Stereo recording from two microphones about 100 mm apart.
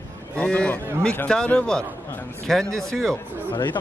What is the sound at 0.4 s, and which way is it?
A man's voice, 10° left (ahead or behind).